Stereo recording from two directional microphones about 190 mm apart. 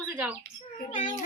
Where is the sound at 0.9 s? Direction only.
40° left (ahead or behind).